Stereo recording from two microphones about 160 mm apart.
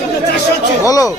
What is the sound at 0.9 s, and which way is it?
Speech, 20° left (ahead or behind).